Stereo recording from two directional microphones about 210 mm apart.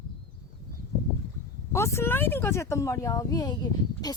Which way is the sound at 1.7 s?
15° left (ahead or behind).